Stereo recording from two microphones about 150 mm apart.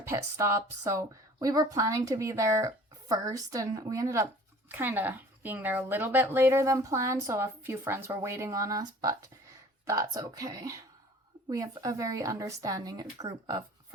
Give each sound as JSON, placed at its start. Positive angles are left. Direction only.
{"t": 0.1, "sound": "speech", "side_deg": -20}